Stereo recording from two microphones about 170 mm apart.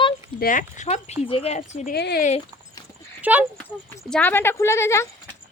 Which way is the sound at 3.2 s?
10° right (ahead or behind).